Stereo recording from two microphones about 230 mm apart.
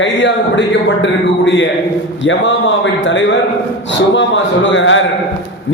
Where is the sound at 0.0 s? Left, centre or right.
Left.